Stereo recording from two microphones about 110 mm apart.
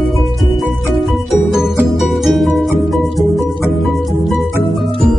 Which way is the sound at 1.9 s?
Centre (ahead or behind).